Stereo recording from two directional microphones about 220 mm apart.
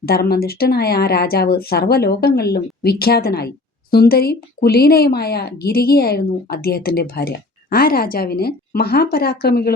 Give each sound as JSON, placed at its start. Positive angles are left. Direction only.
{"t": 0.0, "sound": "speech", "side_deg": 45}